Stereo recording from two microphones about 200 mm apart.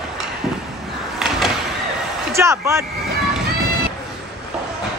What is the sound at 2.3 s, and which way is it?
Speech, 15° right (ahead or behind).